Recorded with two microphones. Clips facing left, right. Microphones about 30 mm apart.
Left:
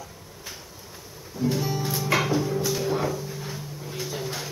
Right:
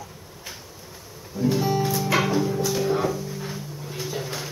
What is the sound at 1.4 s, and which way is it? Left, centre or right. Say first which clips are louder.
Music: right 4 dB; centre.